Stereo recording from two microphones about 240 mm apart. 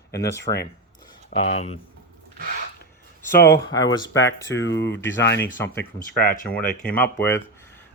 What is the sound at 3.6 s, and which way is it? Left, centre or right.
Speech, centre.